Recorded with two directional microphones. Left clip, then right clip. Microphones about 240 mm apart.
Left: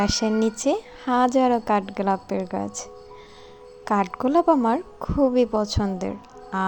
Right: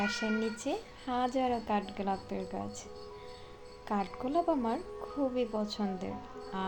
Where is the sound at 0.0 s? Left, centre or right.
Left.